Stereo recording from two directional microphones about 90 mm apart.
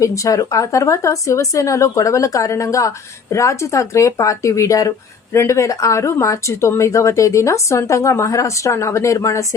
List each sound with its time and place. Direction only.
0.0 s speech: 35° left (ahead or behind)